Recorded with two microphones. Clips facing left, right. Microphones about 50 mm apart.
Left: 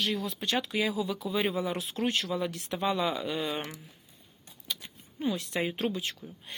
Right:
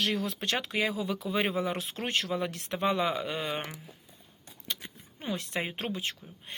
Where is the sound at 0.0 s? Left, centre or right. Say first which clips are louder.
Right 1 dB; right.